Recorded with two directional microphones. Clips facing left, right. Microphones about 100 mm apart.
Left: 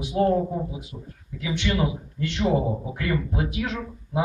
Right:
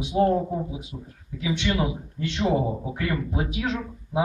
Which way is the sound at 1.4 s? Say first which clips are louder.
Even; 10° right (ahead or behind).